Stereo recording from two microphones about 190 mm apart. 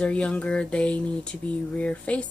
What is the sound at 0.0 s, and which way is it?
Speech, 5° left (ahead or behind).